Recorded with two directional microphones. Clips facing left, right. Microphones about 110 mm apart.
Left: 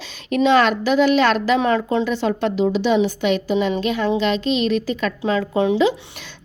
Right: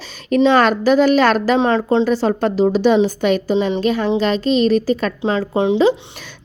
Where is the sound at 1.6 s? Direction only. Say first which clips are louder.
Right 3 dB; 30° right (ahead or behind).